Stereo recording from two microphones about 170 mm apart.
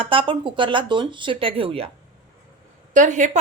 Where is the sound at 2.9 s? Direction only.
45° right (ahead or behind).